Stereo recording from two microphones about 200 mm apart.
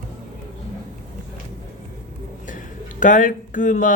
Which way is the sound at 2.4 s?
40° left (ahead or behind).